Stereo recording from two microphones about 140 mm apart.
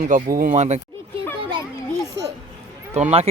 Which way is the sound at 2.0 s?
25° right (ahead or behind).